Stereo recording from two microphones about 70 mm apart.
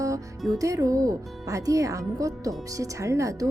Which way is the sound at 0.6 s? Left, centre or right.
Right.